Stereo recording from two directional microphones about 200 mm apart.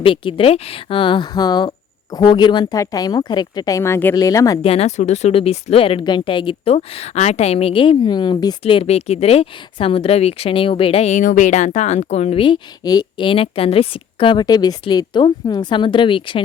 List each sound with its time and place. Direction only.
0.0 s a woman's voice: 25° left (ahead or behind)
4.6 s speech: 30° left (ahead or behind)